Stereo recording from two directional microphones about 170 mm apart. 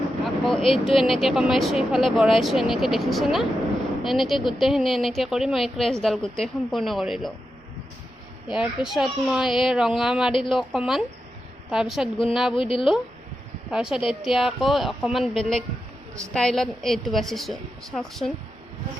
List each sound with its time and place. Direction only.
0.3 s vehicle: centre (ahead or behind)
0.9 s speech: centre (ahead or behind)
8.5 s speech: 5° right (ahead or behind)
10.3 s speech: 30° left (ahead or behind)
10.6 s speech: centre (ahead or behind)
12.5 s a woman's voice: 30° left (ahead or behind)
13.7 s speech: 5° right (ahead or behind)